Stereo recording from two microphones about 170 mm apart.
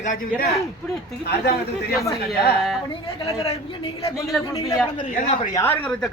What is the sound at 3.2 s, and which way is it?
Speech, 30° left (ahead or behind).